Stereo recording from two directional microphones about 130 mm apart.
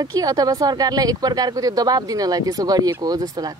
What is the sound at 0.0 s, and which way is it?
Speech, 30° right (ahead or behind).